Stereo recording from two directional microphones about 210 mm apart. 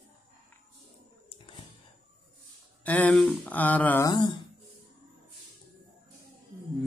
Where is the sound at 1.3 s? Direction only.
25° left (ahead or behind).